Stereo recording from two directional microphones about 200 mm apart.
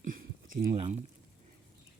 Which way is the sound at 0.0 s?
40° right (ahead or behind).